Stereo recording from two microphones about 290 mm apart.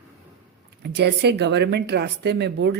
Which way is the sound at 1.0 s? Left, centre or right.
Right.